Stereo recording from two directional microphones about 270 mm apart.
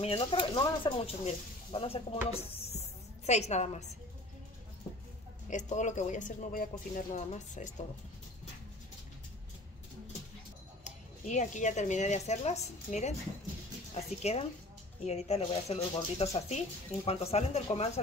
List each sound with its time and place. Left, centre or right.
0.0 s speech: left
5.5 s speech: left
10.8 s speech: left